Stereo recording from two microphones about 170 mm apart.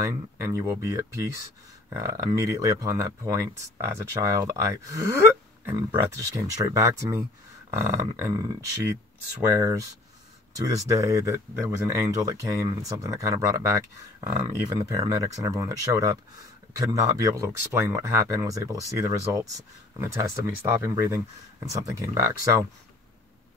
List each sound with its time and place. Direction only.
0.0 s speech: 20° right (ahead or behind)
15.0 s speech: 20° right (ahead or behind)